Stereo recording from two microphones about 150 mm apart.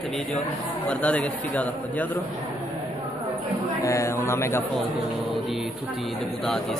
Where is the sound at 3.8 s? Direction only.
20° left (ahead or behind).